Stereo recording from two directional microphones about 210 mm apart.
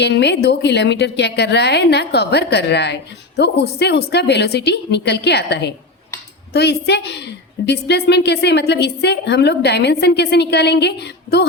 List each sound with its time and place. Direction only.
0.0 s a woman's voice: 55° left (ahead or behind)